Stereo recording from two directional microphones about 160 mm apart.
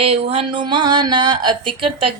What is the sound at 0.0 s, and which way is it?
Speech, 35° right (ahead or behind).